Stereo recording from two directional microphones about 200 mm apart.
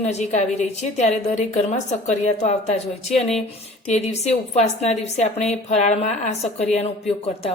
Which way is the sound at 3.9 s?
35° left (ahead or behind).